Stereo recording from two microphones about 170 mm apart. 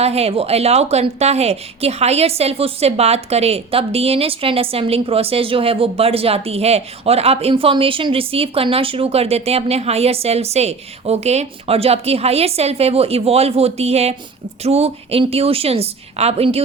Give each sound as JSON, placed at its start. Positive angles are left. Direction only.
{"t": 0.0, "sound": "a woman's voice", "side_deg": -35}